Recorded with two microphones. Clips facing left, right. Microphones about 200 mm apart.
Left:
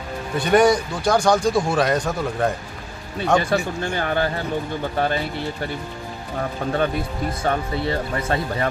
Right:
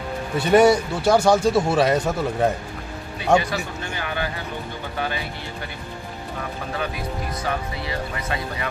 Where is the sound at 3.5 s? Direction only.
45° left (ahead or behind).